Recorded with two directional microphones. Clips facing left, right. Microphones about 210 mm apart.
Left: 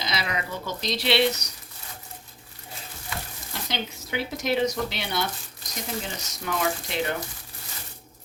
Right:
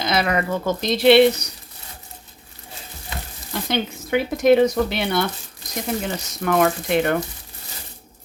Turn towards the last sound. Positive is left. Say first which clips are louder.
# right 8 dB
turn(degrees=-60)  # may be behind; listen again after turning